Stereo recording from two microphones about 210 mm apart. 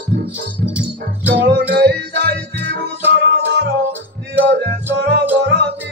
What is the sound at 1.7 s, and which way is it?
Music, 55° right (ahead or behind).